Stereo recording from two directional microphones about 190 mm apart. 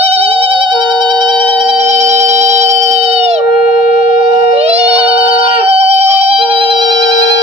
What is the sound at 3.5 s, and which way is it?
Wind instrument, 45° left (ahead or behind).